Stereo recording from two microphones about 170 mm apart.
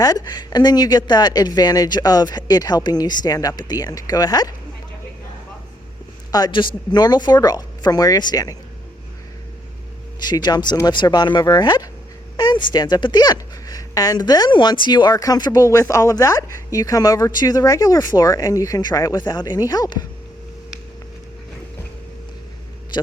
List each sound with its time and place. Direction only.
0.0 s speech: 25° left (ahead or behind)
6.3 s speech: 25° left (ahead or behind)
10.2 s speech: 25° left (ahead or behind)